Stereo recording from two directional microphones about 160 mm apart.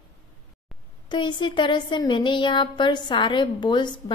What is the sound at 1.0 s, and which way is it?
Speech, 30° left (ahead or behind).